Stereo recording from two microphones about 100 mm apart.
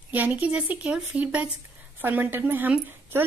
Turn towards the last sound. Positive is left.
turn(degrees=-20)  # may be behind; listen again after turning